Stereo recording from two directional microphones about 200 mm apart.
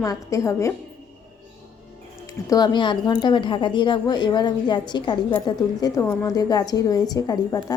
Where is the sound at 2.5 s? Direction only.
20° left (ahead or behind).